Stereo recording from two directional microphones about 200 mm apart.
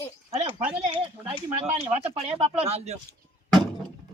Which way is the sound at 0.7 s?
25° right (ahead or behind).